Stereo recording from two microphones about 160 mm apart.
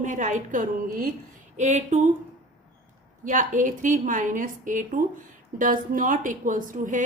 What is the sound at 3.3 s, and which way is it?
A woman's voice, 55° right (ahead or behind).